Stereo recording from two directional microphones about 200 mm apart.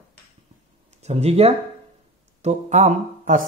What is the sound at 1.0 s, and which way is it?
Speech, 30° right (ahead or behind).